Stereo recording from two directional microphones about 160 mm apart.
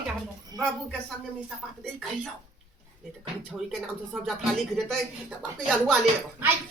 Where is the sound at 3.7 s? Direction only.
10° right (ahead or behind).